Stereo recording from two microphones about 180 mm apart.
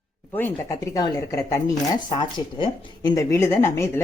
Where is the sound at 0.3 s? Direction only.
15° left (ahead or behind).